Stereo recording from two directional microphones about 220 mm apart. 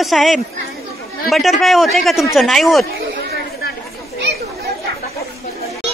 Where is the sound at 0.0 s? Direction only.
Centre (ahead or behind).